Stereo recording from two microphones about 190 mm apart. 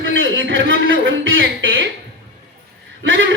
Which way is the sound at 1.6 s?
90° right.